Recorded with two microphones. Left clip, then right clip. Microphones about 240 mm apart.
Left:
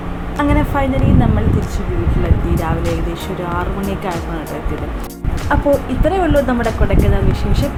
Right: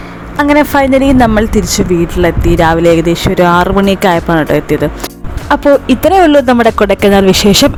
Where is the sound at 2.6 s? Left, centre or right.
Right.